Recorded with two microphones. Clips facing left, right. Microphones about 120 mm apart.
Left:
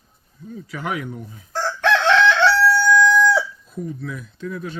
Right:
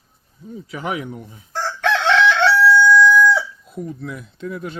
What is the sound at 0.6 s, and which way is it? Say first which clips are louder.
Speech: right 1 dB; 25° right (ahead or behind).